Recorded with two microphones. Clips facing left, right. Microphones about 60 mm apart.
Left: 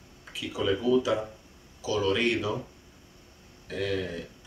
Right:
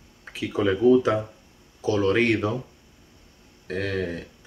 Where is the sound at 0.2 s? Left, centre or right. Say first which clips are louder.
Right 6 dB; right.